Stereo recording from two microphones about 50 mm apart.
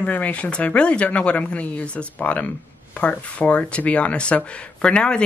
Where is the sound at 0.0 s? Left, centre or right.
Left.